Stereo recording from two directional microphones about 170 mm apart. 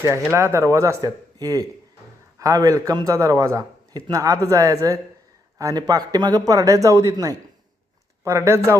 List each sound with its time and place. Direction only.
0.0 s a man's voice: 15° right (ahead or behind)